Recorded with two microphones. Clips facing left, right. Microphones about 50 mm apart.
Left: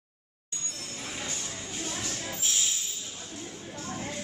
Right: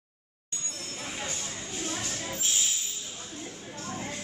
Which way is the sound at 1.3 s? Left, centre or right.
Centre.